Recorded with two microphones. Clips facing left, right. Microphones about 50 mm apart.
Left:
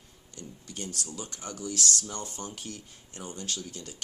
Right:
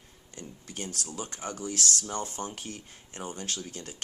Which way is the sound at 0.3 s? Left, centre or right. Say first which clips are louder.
Right 1 dB; right.